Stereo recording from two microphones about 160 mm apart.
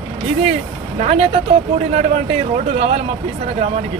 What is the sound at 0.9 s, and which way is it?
Speech, 40° right (ahead or behind).